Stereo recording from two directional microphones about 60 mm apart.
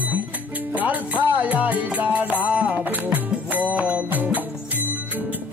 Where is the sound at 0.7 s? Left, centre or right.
Right.